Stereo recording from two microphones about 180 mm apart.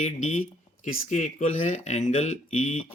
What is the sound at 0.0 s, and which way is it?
Speech, 45° left (ahead or behind).